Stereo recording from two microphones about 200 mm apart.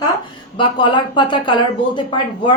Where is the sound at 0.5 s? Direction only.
25° left (ahead or behind).